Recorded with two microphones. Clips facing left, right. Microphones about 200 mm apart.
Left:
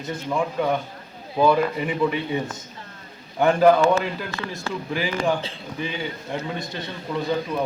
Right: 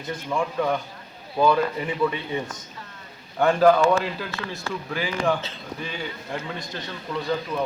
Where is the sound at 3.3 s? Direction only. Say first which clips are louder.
Left 1 dB; 10° left (ahead or behind).